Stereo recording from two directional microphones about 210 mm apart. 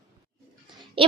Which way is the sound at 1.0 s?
25° right (ahead or behind).